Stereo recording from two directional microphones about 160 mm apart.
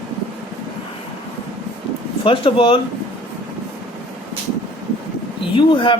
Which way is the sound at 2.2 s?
35° left (ahead or behind).